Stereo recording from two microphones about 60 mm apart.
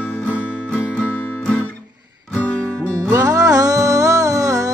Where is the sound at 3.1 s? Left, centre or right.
Right.